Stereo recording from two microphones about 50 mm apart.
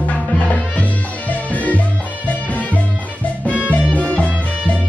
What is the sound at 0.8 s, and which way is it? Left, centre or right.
Music, left.